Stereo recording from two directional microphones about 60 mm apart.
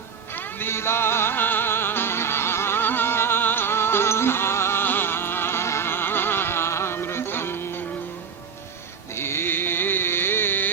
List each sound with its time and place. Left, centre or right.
0.3 s music: left
9.1 s music: left